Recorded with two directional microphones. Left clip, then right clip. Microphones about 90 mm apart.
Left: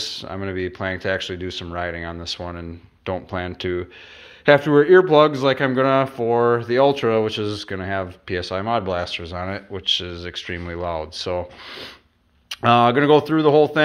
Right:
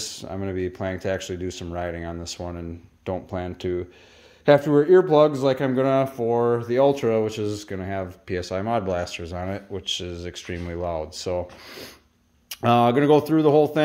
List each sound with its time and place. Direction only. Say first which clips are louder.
0.0 s speech: left 4 dB; 50° right (ahead or behind)
3.1 s speech: left 3 dB; 35° right (ahead or behind)
8.4 s speech: left 3 dB; 40° right (ahead or behind)
8.8 s speech: left 2 dB; 65° right (ahead or behind)
9.8 s speech: left 8 dB; 55° right (ahead or behind)